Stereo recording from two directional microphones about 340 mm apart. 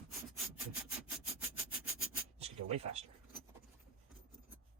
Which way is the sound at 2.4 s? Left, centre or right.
Centre.